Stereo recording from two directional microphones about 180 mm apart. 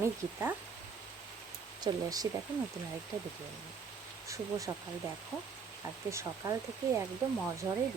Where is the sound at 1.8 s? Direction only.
20° right (ahead or behind).